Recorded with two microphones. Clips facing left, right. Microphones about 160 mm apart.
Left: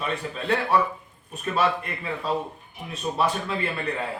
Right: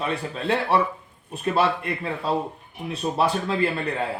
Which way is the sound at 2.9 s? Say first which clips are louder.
Right 2 dB; 30° right (ahead or behind).